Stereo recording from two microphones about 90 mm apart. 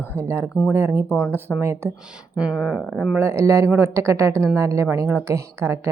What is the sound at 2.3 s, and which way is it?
Speech, 10° right (ahead or behind).